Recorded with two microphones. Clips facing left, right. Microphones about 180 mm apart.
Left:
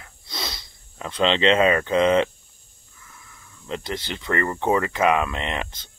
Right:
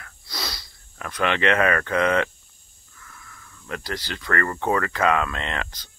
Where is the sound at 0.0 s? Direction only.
25° left (ahead or behind).